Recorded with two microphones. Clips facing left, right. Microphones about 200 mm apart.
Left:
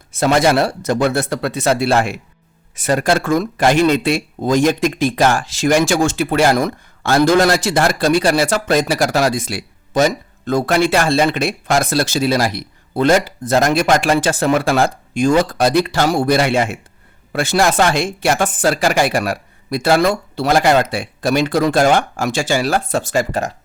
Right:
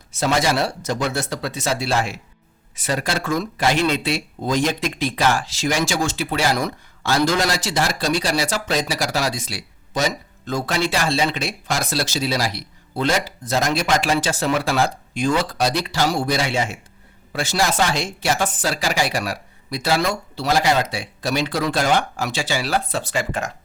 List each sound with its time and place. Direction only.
0.1 s speech: 55° left (ahead or behind); by 23.5 s 40° left (ahead or behind)